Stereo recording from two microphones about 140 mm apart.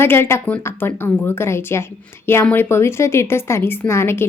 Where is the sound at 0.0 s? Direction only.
15° left (ahead or behind).